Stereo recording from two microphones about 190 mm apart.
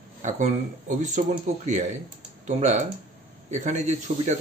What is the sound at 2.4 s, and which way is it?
Speech, 40° right (ahead or behind).